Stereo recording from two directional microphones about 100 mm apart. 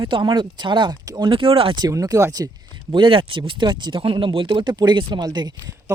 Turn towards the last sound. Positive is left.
turn(degrees=-45)  # may be behind; listen again after turning